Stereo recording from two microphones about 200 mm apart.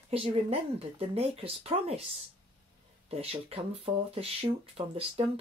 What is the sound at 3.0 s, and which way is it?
Speech, 30° right (ahead or behind).